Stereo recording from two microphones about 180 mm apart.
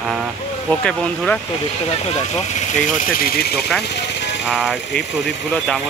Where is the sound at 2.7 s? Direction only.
55° left (ahead or behind).